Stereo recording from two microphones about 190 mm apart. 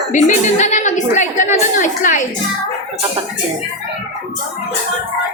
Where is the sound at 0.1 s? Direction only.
40° left (ahead or behind).